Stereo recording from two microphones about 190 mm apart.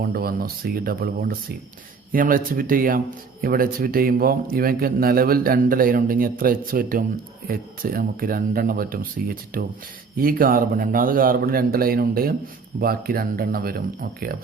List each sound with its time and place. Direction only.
0.0 s a man's voice: 50° right (ahead or behind)